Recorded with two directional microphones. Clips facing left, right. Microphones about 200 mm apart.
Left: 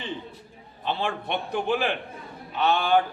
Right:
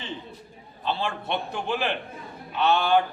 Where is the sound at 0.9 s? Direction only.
15° left (ahead or behind).